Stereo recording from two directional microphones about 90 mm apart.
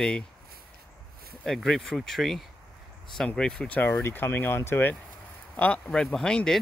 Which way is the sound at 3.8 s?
25° left (ahead or behind).